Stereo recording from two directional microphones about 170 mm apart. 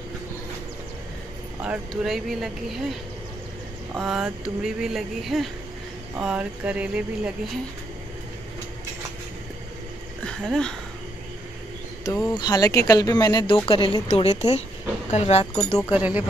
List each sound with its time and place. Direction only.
1.6 s speech: 5° right (ahead or behind)
3.9 s speech: 5° right (ahead or behind)
10.2 s a sound: 5° left (ahead or behind)
12.0 s speech: 20° left (ahead or behind)
14.0 s a woman's voice: 40° left (ahead or behind)
15.5 s speech: 5° left (ahead or behind)
15.9 s speech: 10° right (ahead or behind)